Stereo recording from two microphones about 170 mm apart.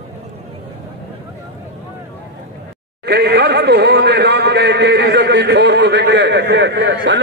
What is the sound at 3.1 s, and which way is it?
A man's voice, 80° right.